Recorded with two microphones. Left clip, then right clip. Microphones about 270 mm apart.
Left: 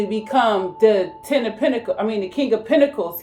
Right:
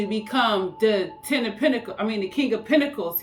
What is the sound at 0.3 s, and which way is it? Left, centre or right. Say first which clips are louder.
Speech: left 5 dB; right.